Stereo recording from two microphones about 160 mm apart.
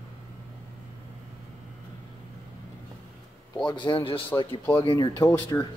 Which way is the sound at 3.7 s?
30° left (ahead or behind).